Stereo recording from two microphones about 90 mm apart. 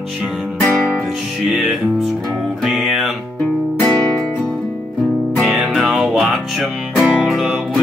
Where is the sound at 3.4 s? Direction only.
10° left (ahead or behind).